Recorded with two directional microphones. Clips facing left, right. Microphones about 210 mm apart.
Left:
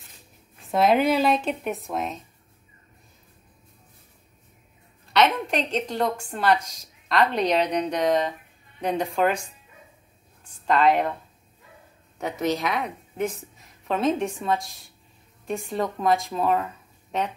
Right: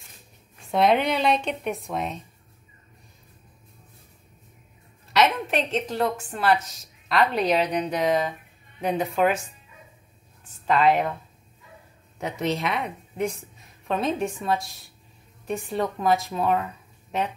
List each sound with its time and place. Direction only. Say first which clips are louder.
0.6 s a woman's voice: left 1 dB; centre (ahead or behind)
5.1 s a woman's voice: even; 5° right (ahead or behind)
10.7 s a woman's voice: even; centre (ahead or behind)
12.2 s a woman's voice: left 1 dB; centre (ahead or behind)